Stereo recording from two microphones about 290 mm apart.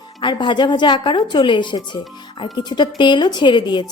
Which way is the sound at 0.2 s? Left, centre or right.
Centre.